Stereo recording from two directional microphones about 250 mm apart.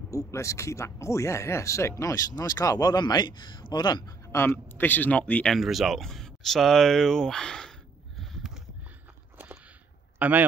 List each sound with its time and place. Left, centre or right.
0.2 s speech: centre
8.2 s a sound: centre
10.1 s speech: centre